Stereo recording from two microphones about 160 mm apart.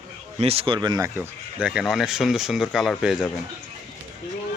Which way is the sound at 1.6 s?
5° right (ahead or behind).